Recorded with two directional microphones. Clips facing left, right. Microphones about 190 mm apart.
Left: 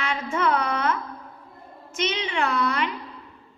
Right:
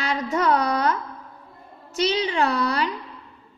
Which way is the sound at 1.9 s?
35° right (ahead or behind).